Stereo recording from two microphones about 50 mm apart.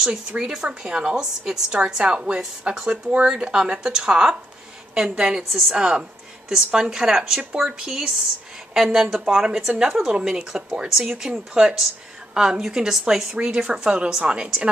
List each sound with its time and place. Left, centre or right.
0.0 s a woman's voice: centre
5.5 s speech: centre
5.8 s a woman's voice: centre
10.1 s a woman's voice: centre